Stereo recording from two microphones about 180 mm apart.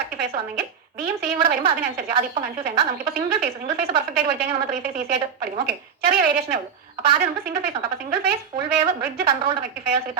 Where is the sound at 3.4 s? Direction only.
60° right (ahead or behind).